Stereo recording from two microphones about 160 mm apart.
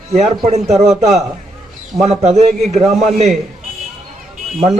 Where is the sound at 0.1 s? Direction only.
45° right (ahead or behind).